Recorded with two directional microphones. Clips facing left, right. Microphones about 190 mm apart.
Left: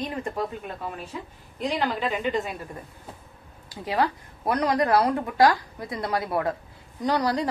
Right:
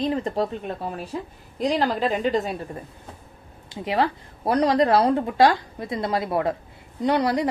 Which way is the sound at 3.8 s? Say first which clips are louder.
Right 2 dB; 25° right (ahead or behind).